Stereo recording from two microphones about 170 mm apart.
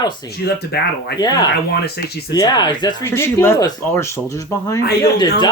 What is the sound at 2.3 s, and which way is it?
Speech, 25° left (ahead or behind).